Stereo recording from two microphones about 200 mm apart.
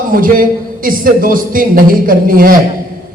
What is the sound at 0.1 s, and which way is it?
Speech, 45° right (ahead or behind).